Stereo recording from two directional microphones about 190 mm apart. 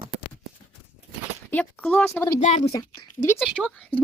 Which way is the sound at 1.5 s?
10° left (ahead or behind).